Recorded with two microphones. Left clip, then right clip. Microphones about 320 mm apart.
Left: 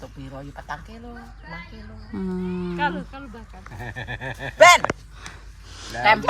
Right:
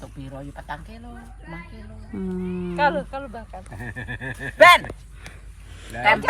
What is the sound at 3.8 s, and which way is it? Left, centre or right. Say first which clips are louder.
Speech: left 2 dB; left.